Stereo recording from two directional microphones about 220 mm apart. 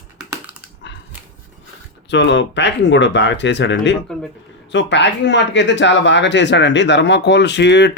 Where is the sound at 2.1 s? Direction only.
55° left (ahead or behind).